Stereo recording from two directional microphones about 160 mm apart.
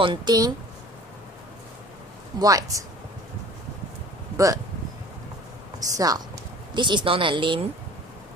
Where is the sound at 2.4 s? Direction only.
20° right (ahead or behind).